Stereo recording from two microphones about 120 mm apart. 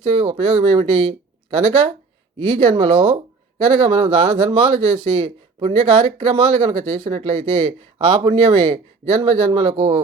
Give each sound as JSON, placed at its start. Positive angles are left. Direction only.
{"t": 0.0, "sound": "speech", "side_deg": -50}